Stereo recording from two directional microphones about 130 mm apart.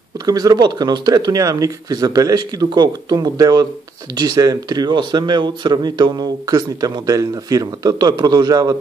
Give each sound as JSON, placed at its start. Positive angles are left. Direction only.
{"t": 0.3, "sound": "speech", "side_deg": -30}